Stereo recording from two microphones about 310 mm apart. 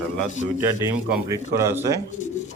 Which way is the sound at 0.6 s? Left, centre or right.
Centre.